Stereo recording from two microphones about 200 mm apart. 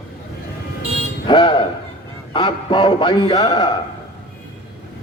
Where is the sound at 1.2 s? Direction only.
25° left (ahead or behind).